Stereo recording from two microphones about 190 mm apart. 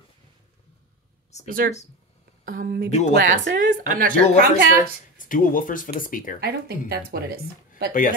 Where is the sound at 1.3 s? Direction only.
35° left (ahead or behind).